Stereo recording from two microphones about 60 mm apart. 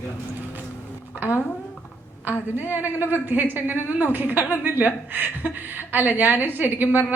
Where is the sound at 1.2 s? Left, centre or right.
Right.